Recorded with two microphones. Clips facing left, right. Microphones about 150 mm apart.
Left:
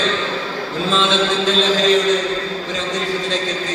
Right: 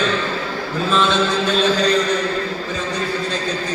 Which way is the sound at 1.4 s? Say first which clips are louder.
Left 1 dB; 90° left.